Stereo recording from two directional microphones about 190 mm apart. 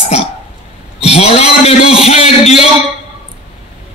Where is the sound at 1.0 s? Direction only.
35° left (ahead or behind).